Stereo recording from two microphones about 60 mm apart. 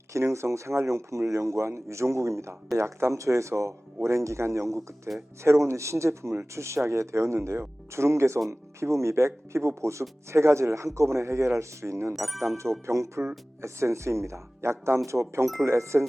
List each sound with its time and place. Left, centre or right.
0.1 s speech: right
12.1 s speech: centre
12.8 s speech: right